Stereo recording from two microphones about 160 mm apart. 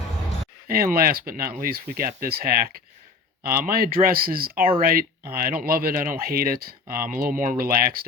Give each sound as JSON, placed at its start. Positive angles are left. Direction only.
{"t": 0.7, "sound": "speech", "side_deg": -65}